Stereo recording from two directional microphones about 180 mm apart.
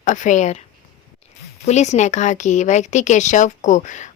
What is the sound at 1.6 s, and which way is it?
A woman's voice, 40° left (ahead or behind).